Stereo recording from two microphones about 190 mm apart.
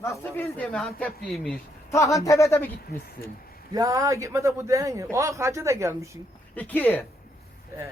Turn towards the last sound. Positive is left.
turn(degrees=10)  # may be behind; listen again after turning